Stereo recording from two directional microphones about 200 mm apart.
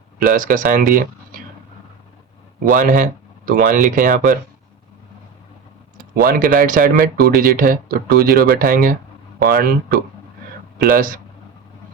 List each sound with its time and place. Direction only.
0.2 s speech: 45° right (ahead or behind)
2.6 s speech: 40° right (ahead or behind)
6.2 s speech: 45° right (ahead or behind)
10.9 s speech: 45° right (ahead or behind)